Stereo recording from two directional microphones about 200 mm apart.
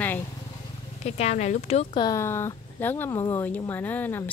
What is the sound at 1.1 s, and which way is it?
Speech, 35° left (ahead or behind).